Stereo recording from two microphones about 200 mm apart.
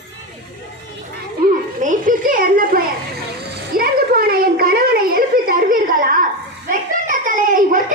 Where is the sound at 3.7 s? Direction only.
45° right (ahead or behind).